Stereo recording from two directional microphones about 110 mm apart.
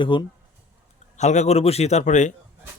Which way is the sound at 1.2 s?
90° left.